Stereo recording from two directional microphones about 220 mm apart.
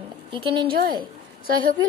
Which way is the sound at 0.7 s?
45° right (ahead or behind).